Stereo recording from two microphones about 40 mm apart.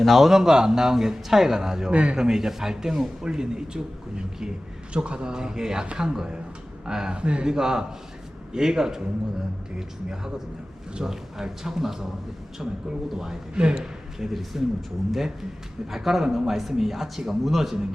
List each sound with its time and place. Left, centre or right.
0.0 s a man's voice: centre
1.9 s speech: right
2.1 s a man's voice: centre
14.2 s a man's voice: centre